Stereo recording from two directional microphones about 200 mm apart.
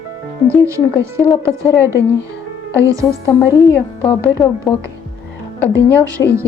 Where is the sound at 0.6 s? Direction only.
15° right (ahead or behind).